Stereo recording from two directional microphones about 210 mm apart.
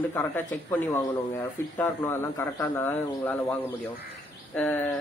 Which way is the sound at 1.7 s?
10° left (ahead or behind).